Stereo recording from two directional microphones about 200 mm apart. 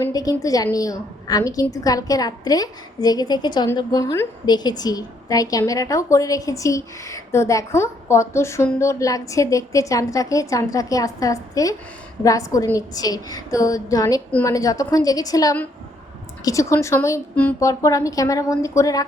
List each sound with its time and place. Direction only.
0.0 s a woman's voice: 20° left (ahead or behind)